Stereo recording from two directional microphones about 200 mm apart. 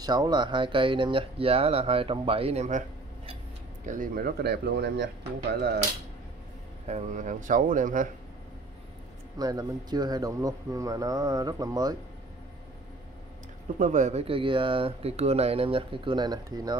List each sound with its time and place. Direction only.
0.0 s speech: 20° right (ahead or behind)
3.8 s speech: 40° right (ahead or behind); by 5.0 s 60° right (ahead or behind)
5.5 s mechanisms: 55° right (ahead or behind)
6.9 s speech: 35° right (ahead or behind)
9.4 s speech: 20° right (ahead or behind)
13.7 s speech: 40° right (ahead or behind); by 16.7 s 20° right (ahead or behind)